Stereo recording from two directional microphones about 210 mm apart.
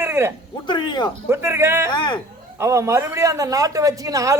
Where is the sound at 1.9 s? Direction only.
20° left (ahead or behind).